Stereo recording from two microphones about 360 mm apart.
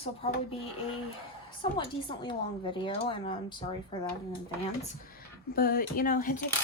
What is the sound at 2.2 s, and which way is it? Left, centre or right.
Speech, centre.